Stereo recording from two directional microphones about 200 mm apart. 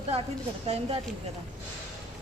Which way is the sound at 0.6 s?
30° right (ahead or behind).